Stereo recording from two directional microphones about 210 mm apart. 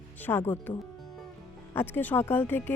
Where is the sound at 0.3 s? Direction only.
10° left (ahead or behind).